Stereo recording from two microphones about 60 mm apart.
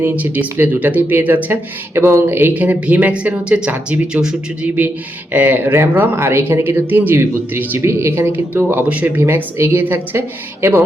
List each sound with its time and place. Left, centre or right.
0.0 s speech: right
2.0 s speech: right; by 4.7 s centre
5.3 s speech: right
8.3 s speech: right
9.2 s speech: right